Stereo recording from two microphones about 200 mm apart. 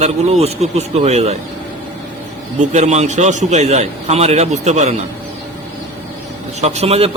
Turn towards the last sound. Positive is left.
turn(degrees=-30)  # may be behind; listen again after turning